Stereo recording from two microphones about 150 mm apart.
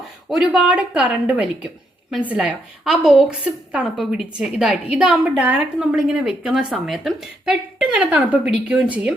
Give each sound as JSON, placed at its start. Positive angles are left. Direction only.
{"t": 0.3, "sound": "speech", "side_deg": -5}